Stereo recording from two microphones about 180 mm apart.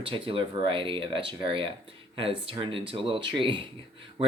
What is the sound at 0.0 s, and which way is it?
Speech, 30° right (ahead or behind).